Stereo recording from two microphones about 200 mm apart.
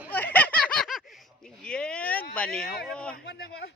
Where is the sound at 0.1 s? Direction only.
10° left (ahead or behind).